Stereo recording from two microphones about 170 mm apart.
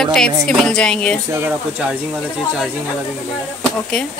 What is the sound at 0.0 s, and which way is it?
A woman's voice, 5° left (ahead or behind).